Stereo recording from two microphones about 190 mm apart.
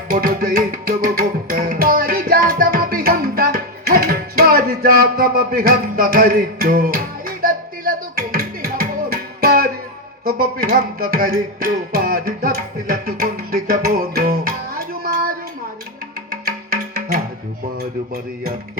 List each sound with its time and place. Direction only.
0.1 s music: 50° right (ahead or behind)